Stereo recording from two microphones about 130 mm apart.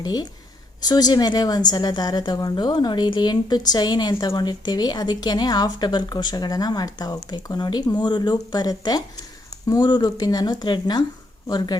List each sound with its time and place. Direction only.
0.0 s a woman's voice: 30° left (ahead or behind)